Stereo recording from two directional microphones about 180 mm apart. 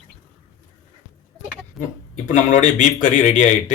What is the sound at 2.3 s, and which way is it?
Speech, 40° left (ahead or behind).